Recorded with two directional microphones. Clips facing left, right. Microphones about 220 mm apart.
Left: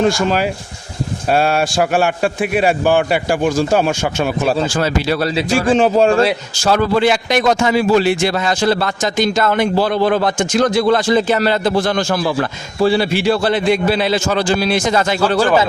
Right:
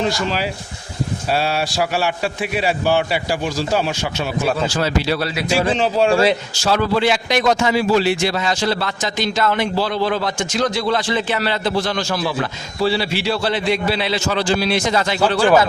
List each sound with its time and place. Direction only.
0.0 s a man's voice: 50° left (ahead or behind)